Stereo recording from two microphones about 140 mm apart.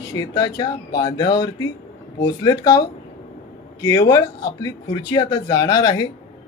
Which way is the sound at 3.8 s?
25° left (ahead or behind).